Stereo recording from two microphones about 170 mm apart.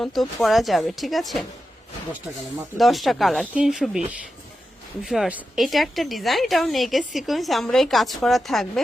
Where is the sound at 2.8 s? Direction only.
Centre (ahead or behind).